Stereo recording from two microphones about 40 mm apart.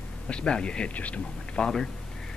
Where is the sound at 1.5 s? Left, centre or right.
Centre.